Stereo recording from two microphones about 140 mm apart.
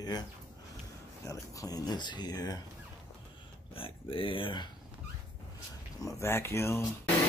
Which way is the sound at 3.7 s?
40° left (ahead or behind).